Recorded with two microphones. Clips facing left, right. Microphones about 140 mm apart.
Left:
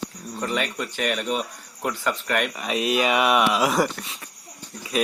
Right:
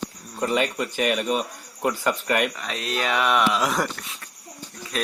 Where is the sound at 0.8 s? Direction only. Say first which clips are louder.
Right 2 dB; 10° right (ahead or behind).